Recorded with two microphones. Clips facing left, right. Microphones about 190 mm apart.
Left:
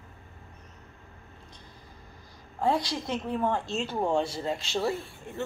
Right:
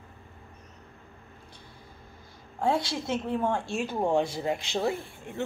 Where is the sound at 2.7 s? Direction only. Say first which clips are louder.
Right 1 dB; 25° right (ahead or behind).